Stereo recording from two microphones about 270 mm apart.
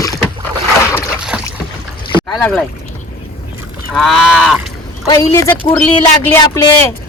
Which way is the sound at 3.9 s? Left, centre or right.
Centre.